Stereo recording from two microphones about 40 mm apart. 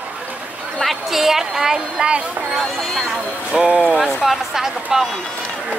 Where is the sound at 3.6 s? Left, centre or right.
Right.